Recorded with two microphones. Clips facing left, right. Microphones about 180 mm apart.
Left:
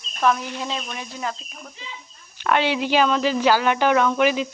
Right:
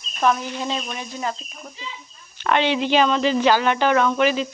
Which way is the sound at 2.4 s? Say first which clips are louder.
Right 1 dB; 5° left (ahead or behind).